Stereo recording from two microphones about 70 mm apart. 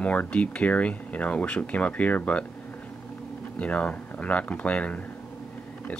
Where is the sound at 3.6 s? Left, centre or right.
Centre.